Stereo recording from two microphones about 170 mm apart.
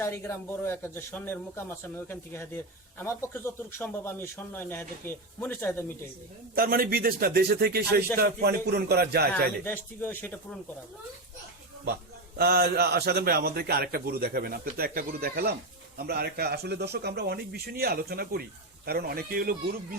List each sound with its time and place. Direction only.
0.0 s a man's voice: 15° left (ahead or behind)
6.5 s a man's voice: 60° right (ahead or behind)
9.6 s a man's voice: 10° left (ahead or behind)
12.4 s a man's voice: 65° right (ahead or behind)